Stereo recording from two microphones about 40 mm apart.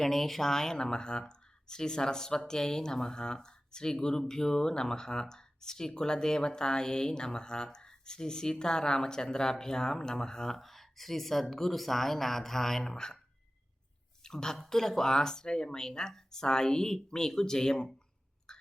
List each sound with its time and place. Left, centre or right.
0.0 s speech: centre
14.3 s speech: centre